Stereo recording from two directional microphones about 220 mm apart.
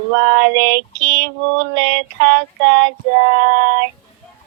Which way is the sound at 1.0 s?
50° right (ahead or behind).